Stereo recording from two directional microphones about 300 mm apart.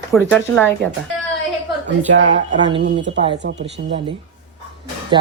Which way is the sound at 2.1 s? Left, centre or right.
Right.